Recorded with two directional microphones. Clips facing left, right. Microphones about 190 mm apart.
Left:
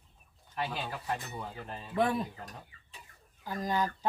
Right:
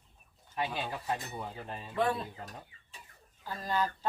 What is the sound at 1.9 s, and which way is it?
Speech, 15° left (ahead or behind).